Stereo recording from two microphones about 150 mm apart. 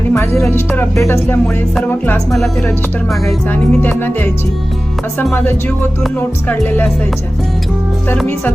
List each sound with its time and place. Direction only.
0.1 s music: 15° left (ahead or behind)
0.5 s speech: 15° left (ahead or behind)
2.3 s speech: centre (ahead or behind)
6.5 s speech: 10° left (ahead or behind)